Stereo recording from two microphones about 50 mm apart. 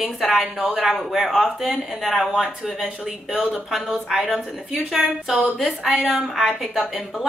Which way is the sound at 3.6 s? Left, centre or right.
Centre.